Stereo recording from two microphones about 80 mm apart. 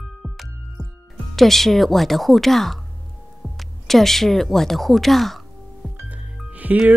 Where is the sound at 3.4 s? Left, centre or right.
Centre.